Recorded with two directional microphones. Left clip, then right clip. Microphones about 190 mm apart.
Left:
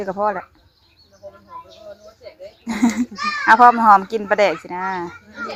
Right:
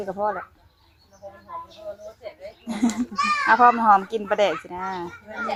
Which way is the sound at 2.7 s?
30° left (ahead or behind).